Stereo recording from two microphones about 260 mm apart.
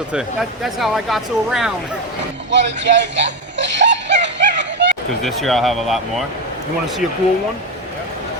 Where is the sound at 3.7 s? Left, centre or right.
Right.